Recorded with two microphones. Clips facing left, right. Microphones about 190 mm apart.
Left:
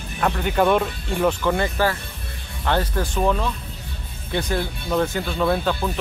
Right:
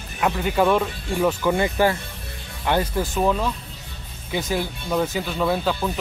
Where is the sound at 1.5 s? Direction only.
15° right (ahead or behind).